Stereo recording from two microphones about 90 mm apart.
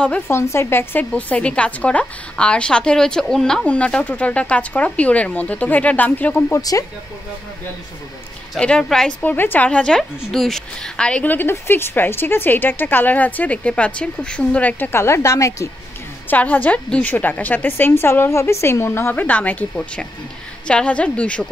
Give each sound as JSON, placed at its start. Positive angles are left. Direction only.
{"t": 0.3, "sound": "a woman's voice", "side_deg": 30}
{"t": 6.7, "sound": "speech", "side_deg": 35}
{"t": 8.5, "sound": "a woman's voice", "side_deg": 10}
{"t": 9.2, "sound": "a woman's voice", "side_deg": 20}
{"t": 16.3, "sound": "a woman's voice", "side_deg": 20}